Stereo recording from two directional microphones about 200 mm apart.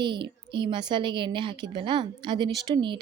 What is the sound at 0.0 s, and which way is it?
A woman's voice, 25° right (ahead or behind).